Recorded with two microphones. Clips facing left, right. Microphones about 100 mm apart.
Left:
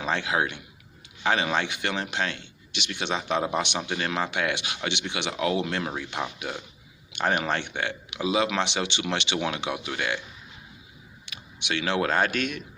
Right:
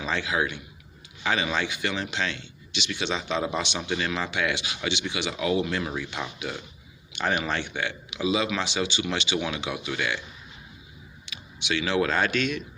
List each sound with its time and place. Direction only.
0.0 s speech: 55° left (ahead or behind)
7.1 s speech: 55° left (ahead or behind)
8.4 s speech: 70° left (ahead or behind); by 10.2 s 45° left (ahead or behind)
11.3 s speech: 55° left (ahead or behind)